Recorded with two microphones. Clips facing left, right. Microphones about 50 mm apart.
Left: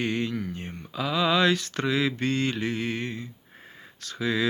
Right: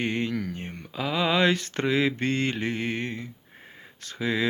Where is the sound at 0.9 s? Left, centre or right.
Right.